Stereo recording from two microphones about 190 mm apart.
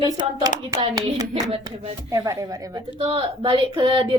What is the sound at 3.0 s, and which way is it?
Speech, 30° right (ahead or behind).